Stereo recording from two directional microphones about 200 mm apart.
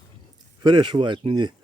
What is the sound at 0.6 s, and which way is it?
Speech, 25° right (ahead or behind).